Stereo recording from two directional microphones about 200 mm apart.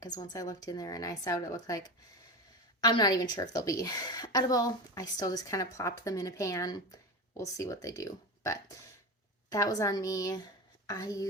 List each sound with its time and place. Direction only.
0.0 s a woman's voice: 20° left (ahead or behind)
2.8 s a woman's voice: 20° left (ahead or behind)